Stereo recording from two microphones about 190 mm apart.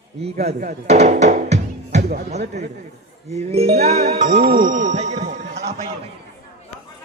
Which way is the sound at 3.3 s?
35° right (ahead or behind).